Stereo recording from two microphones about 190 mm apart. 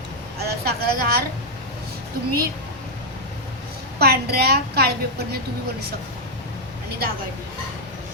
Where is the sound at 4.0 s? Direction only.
55° right (ahead or behind).